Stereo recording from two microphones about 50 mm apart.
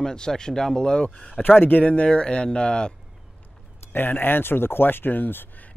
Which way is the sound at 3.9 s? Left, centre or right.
Left.